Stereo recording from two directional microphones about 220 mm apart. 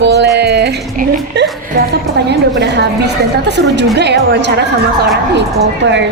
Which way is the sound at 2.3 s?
50° right (ahead or behind).